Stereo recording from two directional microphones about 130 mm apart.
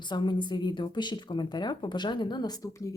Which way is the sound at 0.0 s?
35° left (ahead or behind).